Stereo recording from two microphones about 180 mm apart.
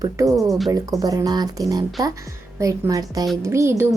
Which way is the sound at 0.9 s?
20° right (ahead or behind).